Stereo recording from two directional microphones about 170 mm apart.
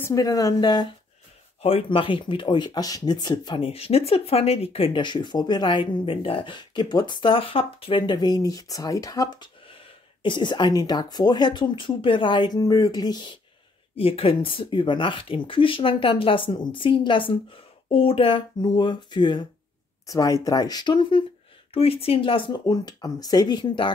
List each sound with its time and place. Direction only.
0.0 s speech: 20° left (ahead or behind)